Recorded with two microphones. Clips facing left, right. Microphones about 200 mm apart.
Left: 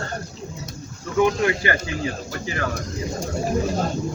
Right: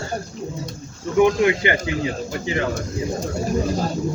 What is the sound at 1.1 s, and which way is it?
Speech, 20° right (ahead or behind).